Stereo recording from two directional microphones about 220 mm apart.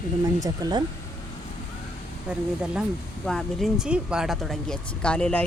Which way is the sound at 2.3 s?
5° right (ahead or behind).